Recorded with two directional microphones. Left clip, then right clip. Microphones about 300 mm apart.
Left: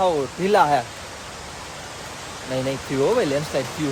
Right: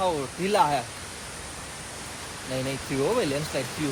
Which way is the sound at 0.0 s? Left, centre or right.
Centre.